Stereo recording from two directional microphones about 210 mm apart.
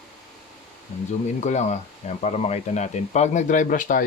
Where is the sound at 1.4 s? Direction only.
35° left (ahead or behind).